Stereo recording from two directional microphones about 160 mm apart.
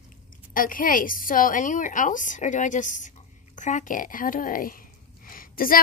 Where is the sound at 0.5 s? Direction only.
60° left (ahead or behind).